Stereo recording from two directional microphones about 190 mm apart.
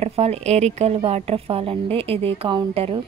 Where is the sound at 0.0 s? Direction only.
35° right (ahead or behind).